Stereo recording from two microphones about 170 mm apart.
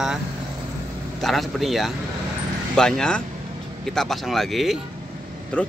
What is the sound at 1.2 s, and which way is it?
Speech, centre (ahead or behind).